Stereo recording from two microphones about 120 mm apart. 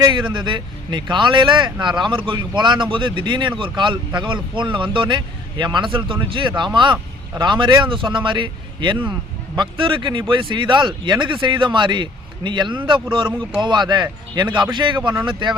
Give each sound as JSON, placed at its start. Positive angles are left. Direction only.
{"t": 0.0, "sound": "speech", "side_deg": -40}